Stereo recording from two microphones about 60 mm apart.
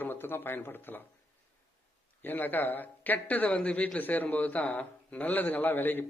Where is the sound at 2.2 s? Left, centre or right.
Left.